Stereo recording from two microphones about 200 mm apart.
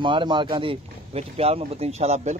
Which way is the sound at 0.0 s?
25° right (ahead or behind).